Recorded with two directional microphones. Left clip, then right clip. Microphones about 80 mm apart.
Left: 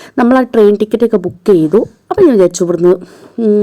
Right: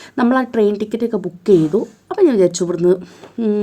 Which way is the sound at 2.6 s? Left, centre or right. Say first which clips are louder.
Left 6 dB; left.